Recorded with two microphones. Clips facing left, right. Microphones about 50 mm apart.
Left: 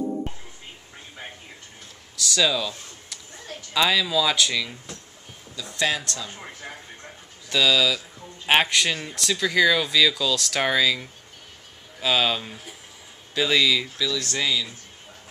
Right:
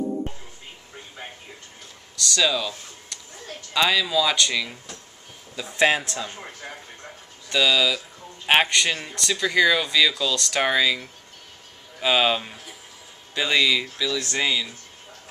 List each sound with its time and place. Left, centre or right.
2.1 s speech: centre
5.6 s speech: right
6.6 s music: centre
7.4 s speech: centre
12.0 s speech: centre